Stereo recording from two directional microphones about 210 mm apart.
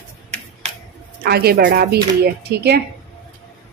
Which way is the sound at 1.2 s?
50° right (ahead or behind).